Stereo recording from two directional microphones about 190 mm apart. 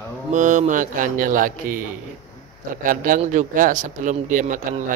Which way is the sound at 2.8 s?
45° right (ahead or behind).